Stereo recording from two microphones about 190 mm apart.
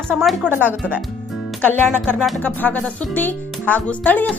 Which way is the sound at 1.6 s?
10° left (ahead or behind).